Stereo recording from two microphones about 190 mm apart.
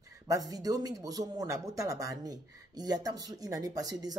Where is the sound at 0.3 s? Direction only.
20° right (ahead or behind).